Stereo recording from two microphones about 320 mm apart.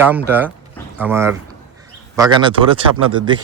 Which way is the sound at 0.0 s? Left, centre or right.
Centre.